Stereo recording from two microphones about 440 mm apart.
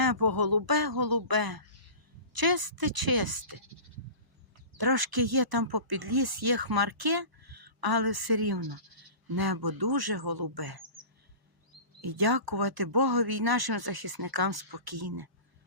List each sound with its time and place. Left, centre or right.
0.0 s speech: right
4.8 s speech: right
12.0 s speech: right